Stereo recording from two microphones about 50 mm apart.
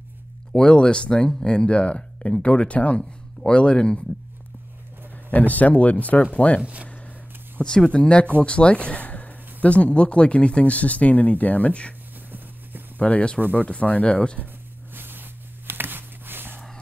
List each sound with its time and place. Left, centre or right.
0.5 s speech: centre
5.3 s speech: left
6.6 s speech: right
7.6 s speech: centre
13.0 s speech: left
13.4 s speech: right
13.7 s speech: left
15.0 s a sound: right